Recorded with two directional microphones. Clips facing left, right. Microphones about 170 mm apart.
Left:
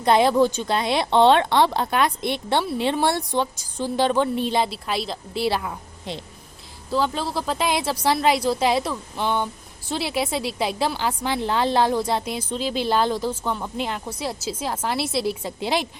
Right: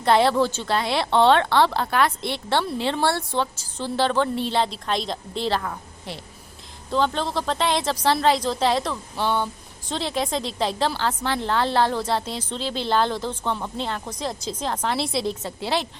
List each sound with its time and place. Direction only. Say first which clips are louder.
0.0 s a woman's voice: left 1 dB; 15° left (ahead or behind)